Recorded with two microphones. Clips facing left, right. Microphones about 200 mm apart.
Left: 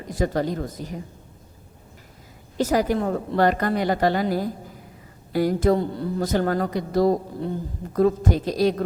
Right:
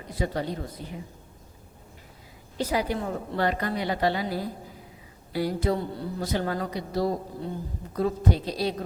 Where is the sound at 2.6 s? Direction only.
45° left (ahead or behind).